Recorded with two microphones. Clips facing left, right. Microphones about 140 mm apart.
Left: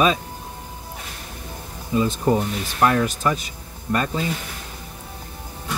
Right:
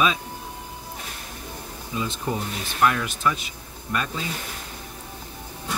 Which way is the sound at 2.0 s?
45° left (ahead or behind).